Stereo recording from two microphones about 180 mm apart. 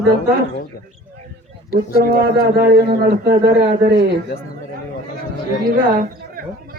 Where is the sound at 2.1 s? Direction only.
55° right (ahead or behind).